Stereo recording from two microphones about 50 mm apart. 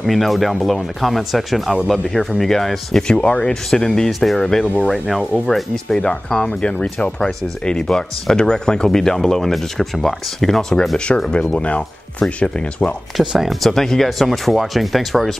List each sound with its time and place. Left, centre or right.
0.0 s speech: centre
11.5 s speech: left
13.2 s speech: centre
13.6 s speech: centre